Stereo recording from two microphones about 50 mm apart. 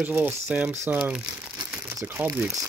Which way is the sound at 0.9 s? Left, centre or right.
Right.